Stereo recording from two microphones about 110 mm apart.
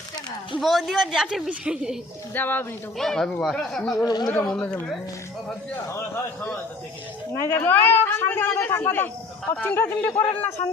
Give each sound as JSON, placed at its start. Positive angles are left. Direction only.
{"t": 0.6, "sound": "a woman's voice", "side_deg": 0}
{"t": 2.3, "sound": "speech", "side_deg": 20}
{"t": 3.0, "sound": "a woman's voice", "side_deg": 5}
{"t": 4.0, "sound": "speech", "side_deg": 40}
{"t": 4.4, "sound": "speech", "side_deg": 10}
{"t": 5.7, "sound": "speech", "side_deg": 25}
{"t": 7.4, "sound": "speech", "side_deg": 20}